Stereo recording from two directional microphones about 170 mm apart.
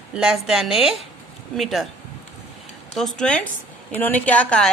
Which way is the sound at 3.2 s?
5° left (ahead or behind).